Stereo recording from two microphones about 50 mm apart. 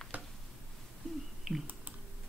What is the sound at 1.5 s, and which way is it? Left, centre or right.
Speech, centre.